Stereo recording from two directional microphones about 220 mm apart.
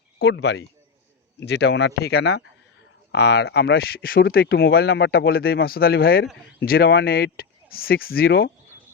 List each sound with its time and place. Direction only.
0.2 s speech: 50° left (ahead or behind)